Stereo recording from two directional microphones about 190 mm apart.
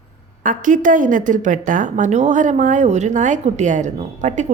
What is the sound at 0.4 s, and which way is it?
A woman's voice, 45° right (ahead or behind).